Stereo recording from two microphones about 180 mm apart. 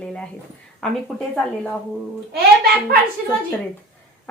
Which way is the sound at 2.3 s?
60° right (ahead or behind).